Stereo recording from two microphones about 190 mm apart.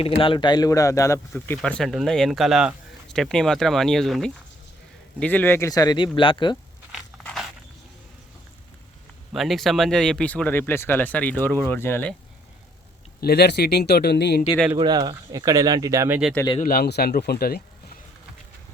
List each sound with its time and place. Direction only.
0.0 s speech: 25° left (ahead or behind)
7.3 s walk: centre (ahead or behind)
9.3 s speech: centre (ahead or behind)
13.2 s speech: 60° left (ahead or behind)
14.8 s speech: 25° right (ahead or behind)
16.6 s speech: 50° left (ahead or behind)